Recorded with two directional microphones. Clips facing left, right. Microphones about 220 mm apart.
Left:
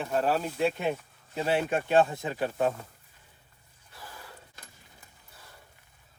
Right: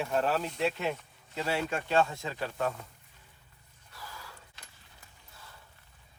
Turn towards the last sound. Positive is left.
turn(degrees=30)  # may be behind; listen again after turning